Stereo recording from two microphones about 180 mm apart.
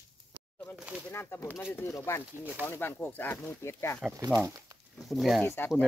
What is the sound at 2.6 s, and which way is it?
Speech, 15° left (ahead or behind).